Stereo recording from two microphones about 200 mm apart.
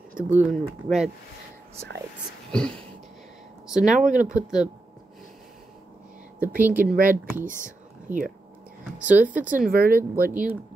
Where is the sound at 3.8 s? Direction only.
40° right (ahead or behind).